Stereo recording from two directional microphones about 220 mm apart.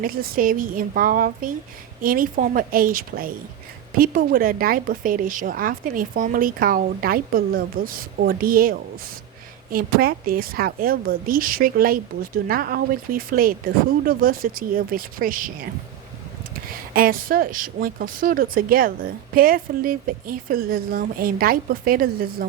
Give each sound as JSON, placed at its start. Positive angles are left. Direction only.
{"t": 0.0, "sound": "speech", "side_deg": -40}
{"t": 9.7, "sound": "speech", "side_deg": -40}
{"t": 16.9, "sound": "speech", "side_deg": -40}